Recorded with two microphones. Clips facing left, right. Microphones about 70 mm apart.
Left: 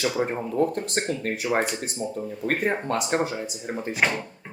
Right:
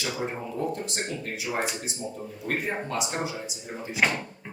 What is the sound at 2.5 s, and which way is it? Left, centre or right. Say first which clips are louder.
Speech: left 4 dB; left.